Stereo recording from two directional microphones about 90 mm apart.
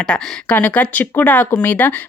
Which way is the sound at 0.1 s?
15° left (ahead or behind).